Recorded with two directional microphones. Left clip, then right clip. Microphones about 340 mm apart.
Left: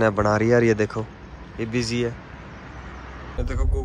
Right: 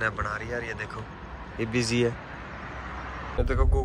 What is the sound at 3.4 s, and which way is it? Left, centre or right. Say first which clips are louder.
Speech: right 3 dB; centre.